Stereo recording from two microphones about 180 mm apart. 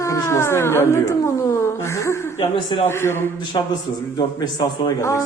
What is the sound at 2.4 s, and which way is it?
Speech, 25° left (ahead or behind).